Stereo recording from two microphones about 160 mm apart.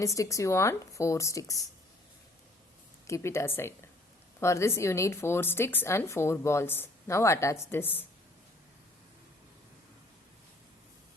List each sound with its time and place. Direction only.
0.0 s speech: 20° left (ahead or behind)
3.1 s speech: 15° left (ahead or behind)